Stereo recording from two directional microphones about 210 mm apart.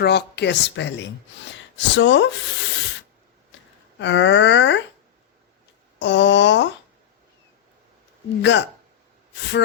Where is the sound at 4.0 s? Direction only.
60° left (ahead or behind).